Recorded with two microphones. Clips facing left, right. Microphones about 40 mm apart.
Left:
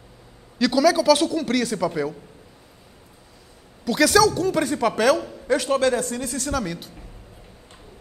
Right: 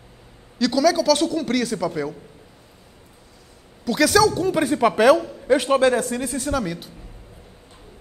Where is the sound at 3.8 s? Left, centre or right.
Centre; by 5.9 s right.